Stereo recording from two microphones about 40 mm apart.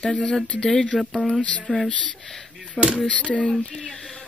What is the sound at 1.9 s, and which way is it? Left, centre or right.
Speech, left.